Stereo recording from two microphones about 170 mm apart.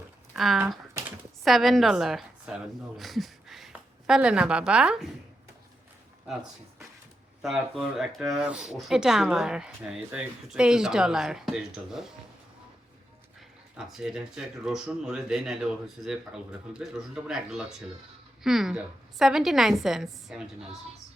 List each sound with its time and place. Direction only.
0.3 s speech: centre (ahead or behind)
1.0 s typing: 20° right (ahead or behind)
1.5 s speech: centre (ahead or behind)
7.4 s speech: centre (ahead or behind)
13.7 s speech: 5° right (ahead or behind)